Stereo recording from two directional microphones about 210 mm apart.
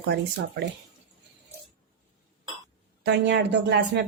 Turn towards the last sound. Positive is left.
turn(degrees=-55)  # may be behind; listen again after turning